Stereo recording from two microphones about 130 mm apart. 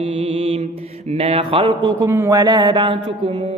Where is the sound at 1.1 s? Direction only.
45° right (ahead or behind).